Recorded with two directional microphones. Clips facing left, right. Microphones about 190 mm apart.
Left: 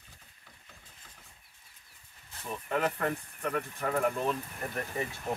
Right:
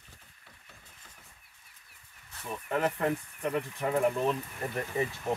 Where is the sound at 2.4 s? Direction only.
5° right (ahead or behind).